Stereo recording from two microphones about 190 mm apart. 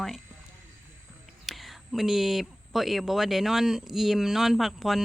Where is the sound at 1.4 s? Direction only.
Centre (ahead or behind).